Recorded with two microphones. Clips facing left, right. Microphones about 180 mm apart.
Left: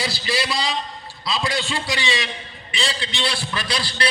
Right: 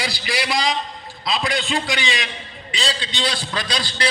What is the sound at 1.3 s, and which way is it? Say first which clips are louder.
A man's voice: right 2 dB; 20° right (ahead or behind).